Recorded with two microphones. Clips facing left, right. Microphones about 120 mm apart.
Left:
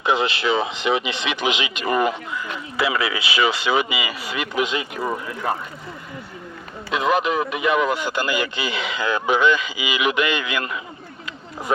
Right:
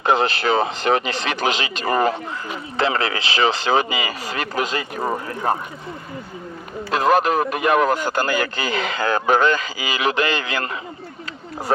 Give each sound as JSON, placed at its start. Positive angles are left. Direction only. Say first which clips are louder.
{"t": 0.0, "sound": "speech", "louder": "right 2 dB", "side_deg": -40}
{"t": 6.9, "sound": "speech", "louder": "right 3 dB", "side_deg": -40}